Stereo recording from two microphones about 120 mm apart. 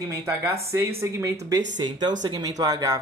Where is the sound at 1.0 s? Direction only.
25° right (ahead or behind).